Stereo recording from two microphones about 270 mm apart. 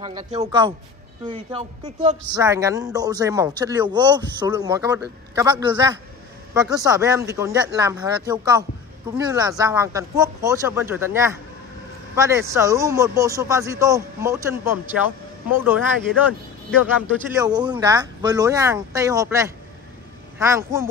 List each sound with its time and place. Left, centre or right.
0.0 s a man's voice: centre
2.4 s speech: centre
17.4 s speech: centre